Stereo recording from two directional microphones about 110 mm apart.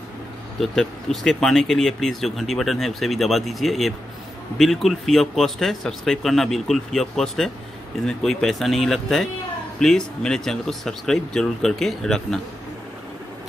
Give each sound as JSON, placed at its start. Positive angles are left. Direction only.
{"t": 0.6, "sound": "speech", "side_deg": 0}